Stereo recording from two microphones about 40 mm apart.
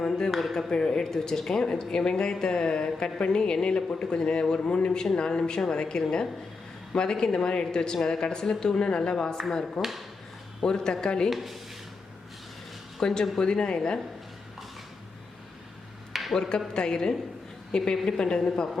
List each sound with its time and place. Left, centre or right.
0.3 s speech: centre
0.7 s a woman's voice: centre
11.3 s speech: centre
13.0 s a woman's voice: centre
16.1 s a sound: centre
16.7 s a woman's voice: centre